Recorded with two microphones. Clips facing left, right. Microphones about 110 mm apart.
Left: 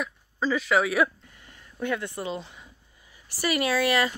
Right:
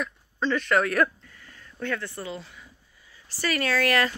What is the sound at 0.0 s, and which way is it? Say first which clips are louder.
Speech: even; 5° left (ahead or behind).